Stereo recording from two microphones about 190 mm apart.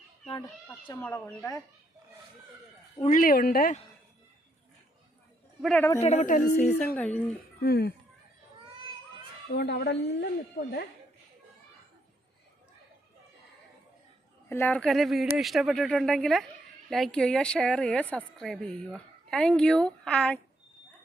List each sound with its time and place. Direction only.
1.0 s speech: 10° left (ahead or behind)
3.0 s speech: 45° left (ahead or behind)
5.6 s speech: 10° left (ahead or behind)
6.0 s speech: 35° left (ahead or behind)
7.6 s speech: 55° left (ahead or behind)
9.5 s speech: 60° left (ahead or behind)
14.5 s speech: 10° left (ahead or behind)